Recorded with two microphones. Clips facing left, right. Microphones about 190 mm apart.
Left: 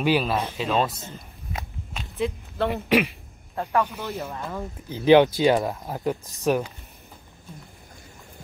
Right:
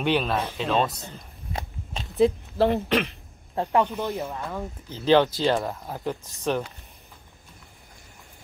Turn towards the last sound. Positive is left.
turn(degrees=5)  # may be behind; listen again after turning